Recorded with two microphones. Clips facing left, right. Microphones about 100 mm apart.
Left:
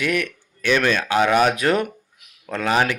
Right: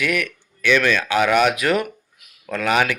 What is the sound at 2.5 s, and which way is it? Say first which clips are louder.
Speech: even; 30° left (ahead or behind).